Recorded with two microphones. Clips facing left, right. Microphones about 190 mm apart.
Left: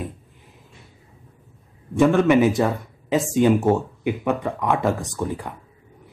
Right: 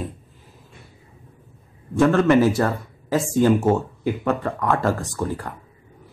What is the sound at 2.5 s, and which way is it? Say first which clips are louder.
Speech: left 1 dB; centre (ahead or behind).